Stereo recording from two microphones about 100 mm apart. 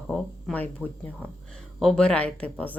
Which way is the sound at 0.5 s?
15° left (ahead or behind).